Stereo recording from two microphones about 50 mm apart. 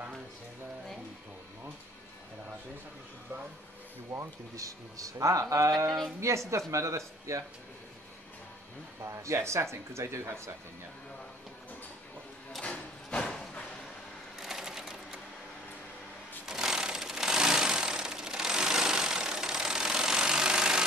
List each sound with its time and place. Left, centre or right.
4.1 s speech: right
5.2 s speech: right
5.9 s speech: centre
6.5 s speech: right
9.0 s speech: right
12.6 s a sound: centre
14.4 s sewing machine: centre
16.4 s sewing machine: centre